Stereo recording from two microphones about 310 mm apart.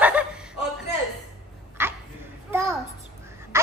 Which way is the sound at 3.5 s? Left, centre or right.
Centre.